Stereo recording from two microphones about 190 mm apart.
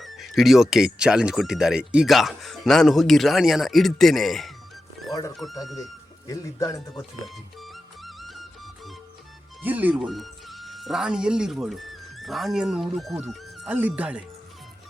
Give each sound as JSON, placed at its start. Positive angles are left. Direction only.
{"t": 0.0, "sound": "speech", "side_deg": 0}
{"t": 5.6, "sound": "speech", "side_deg": 0}
{"t": 6.2, "sound": "speech", "side_deg": 15}
{"t": 7.6, "sound": "music", "side_deg": 0}
{"t": 9.6, "sound": "speech", "side_deg": -10}